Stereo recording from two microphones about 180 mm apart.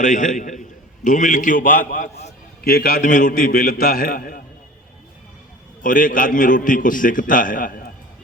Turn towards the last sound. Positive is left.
turn(degrees=50)  # may be behind; listen again after turning